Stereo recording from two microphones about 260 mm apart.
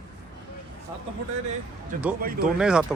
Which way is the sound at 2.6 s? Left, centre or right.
Centre.